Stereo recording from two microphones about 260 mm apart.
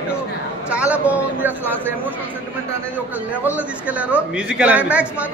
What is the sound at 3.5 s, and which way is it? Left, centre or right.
A woman's voice, centre.